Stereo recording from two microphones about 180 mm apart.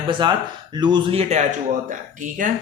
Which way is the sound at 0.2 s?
25° right (ahead or behind).